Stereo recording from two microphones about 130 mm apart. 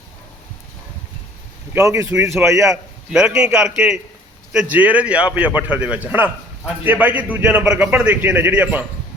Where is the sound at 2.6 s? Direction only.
5° right (ahead or behind).